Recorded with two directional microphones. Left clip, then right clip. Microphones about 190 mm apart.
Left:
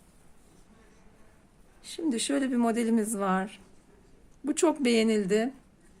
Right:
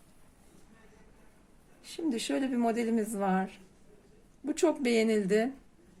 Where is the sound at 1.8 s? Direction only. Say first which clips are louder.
Left 3 dB; 20° left (ahead or behind).